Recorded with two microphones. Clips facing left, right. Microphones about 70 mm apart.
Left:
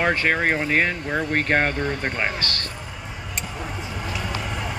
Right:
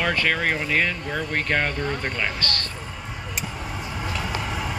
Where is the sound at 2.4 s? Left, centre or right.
Right.